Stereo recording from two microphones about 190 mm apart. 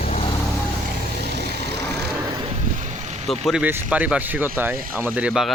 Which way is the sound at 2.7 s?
40° right (ahead or behind).